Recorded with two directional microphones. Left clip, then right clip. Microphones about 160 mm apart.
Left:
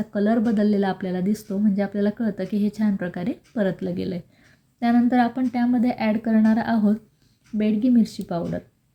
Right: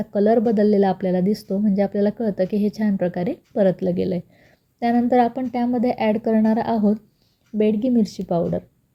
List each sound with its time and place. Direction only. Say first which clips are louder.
0.1 s speech: right 6 dB; 20° right (ahead or behind)